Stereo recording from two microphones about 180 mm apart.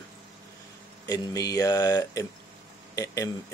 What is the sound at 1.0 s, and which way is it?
Speech, 20° left (ahead or behind).